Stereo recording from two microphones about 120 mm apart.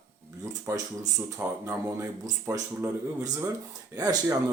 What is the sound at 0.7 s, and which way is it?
Speech, 20° right (ahead or behind).